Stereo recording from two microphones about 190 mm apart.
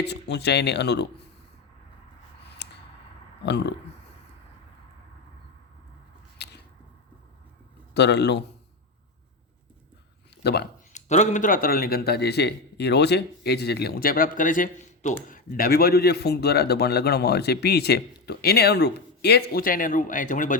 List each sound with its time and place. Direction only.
0.0 s a man's voice: 60° left (ahead or behind)
2.4 s scissors: 60° left (ahead or behind)
6.4 s squish: 60° left (ahead or behind)
7.9 s a man's voice: 65° left (ahead or behind)
10.4 s speech: 60° left (ahead or behind)
10.9 s a man's voice: 40° left (ahead or behind)